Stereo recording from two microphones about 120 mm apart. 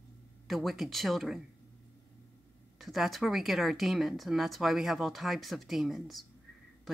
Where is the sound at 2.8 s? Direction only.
Centre (ahead or behind).